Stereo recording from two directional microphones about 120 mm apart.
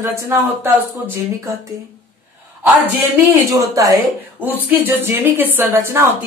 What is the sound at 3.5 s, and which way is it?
Speech, 30° right (ahead or behind).